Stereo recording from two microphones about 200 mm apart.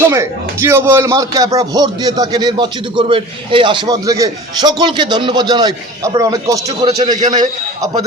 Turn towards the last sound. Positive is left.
turn(degrees=-40)  # may be behind; listen again after turning